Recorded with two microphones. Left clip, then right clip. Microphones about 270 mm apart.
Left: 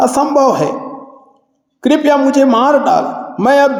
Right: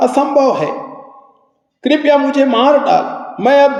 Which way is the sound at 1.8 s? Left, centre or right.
Left.